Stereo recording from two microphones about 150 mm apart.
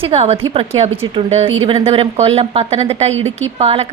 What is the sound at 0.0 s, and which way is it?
A woman's voice, 40° right (ahead or behind).